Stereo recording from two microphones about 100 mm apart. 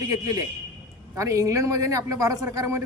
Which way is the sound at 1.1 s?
30° right (ahead or behind).